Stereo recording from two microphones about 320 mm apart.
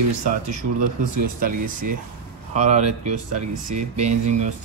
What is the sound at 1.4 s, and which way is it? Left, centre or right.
Speech, right.